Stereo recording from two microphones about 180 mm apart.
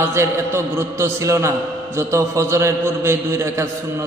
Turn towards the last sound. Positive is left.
turn(degrees=-15)  # may be behind; listen again after turning